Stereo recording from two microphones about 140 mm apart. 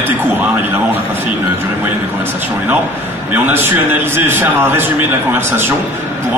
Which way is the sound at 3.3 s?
15° right (ahead or behind).